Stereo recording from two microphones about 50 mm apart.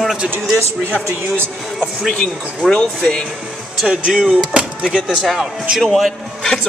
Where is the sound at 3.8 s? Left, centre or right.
Centre.